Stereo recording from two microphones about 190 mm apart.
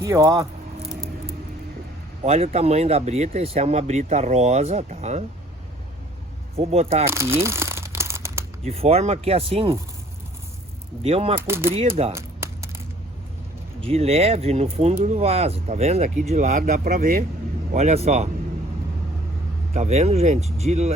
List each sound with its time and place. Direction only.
0.0 s speech: 15° right (ahead or behind)
2.2 s speech: 35° right (ahead or behind)
6.6 s speech: 30° right (ahead or behind)
7.1 s crumpling: 15° right (ahead or behind)
8.6 s speech: 30° right (ahead or behind)
11.0 s speech: 30° right (ahead or behind)
11.3 s speech: 10° right (ahead or behind)
12.1 s a sound: 15° right (ahead or behind)
13.8 s speech: 30° right (ahead or behind); by 17.2 s 50° right (ahead or behind)
17.7 s speech: 35° right (ahead or behind)
19.7 s speech: 35° right (ahead or behind)